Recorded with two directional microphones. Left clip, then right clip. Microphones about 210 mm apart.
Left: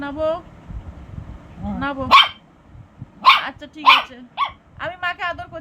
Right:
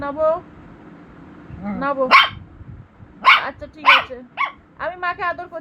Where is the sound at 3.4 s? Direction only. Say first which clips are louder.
Left 1 dB; 15° right (ahead or behind).